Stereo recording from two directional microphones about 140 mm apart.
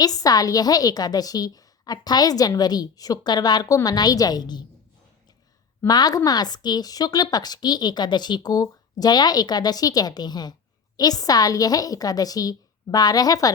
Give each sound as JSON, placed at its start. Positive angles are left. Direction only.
{"t": 0.0, "sound": "a woman's voice", "side_deg": 25}
{"t": 5.8, "sound": "a woman's voice", "side_deg": 30}